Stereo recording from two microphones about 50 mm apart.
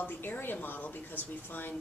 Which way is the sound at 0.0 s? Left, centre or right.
Left.